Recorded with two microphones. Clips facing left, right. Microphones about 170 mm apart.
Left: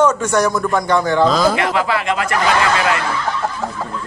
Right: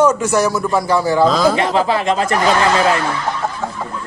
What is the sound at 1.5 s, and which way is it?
Speech, 30° right (ahead or behind).